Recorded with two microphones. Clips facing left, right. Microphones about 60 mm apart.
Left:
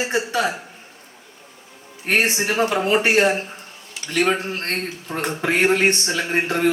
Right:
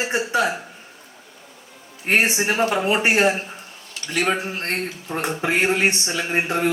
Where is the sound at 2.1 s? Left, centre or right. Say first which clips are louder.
Even; centre.